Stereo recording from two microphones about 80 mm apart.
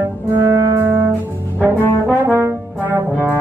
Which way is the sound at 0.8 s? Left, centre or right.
Right.